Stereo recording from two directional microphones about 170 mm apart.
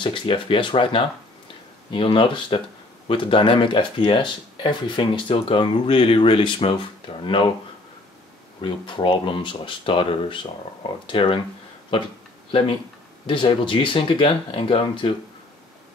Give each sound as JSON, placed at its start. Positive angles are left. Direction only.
{"t": 0.0, "sound": "speech", "side_deg": 30}
{"t": 8.5, "sound": "speech", "side_deg": 30}
{"t": 12.4, "sound": "speech", "side_deg": 30}